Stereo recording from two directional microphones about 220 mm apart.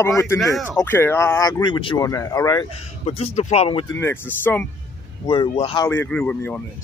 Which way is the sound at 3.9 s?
10° left (ahead or behind).